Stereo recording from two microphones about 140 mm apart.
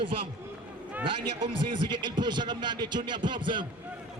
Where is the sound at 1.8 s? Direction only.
35° right (ahead or behind).